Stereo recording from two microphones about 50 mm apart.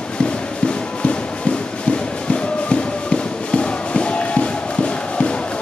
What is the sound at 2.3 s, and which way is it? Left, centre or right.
Music, left.